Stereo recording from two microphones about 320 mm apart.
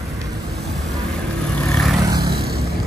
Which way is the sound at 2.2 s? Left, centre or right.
Right.